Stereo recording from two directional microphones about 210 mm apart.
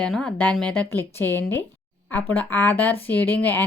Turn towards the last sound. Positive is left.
turn(degrees=10)  # may be behind; listen again after turning